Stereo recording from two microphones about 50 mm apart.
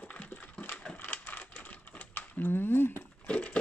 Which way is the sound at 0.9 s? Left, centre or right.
Left.